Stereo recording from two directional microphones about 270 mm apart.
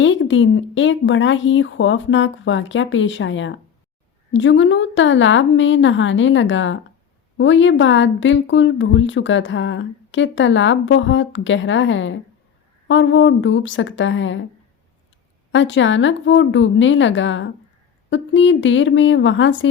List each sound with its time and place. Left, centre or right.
0.0 s speech: left
15.5 s speech: left